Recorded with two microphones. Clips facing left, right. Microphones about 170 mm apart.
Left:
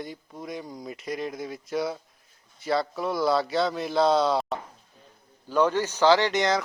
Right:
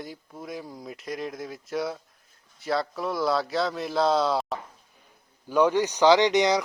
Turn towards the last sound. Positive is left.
turn(degrees=-15)  # may be behind; listen again after turning